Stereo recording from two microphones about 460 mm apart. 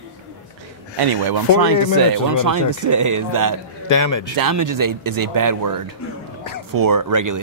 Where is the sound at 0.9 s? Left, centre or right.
Right.